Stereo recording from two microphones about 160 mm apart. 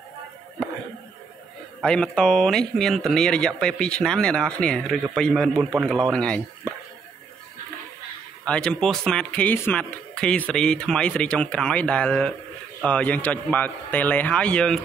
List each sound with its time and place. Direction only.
1.8 s a man's voice: 5° left (ahead or behind)
8.5 s a man's voice: 5° left (ahead or behind)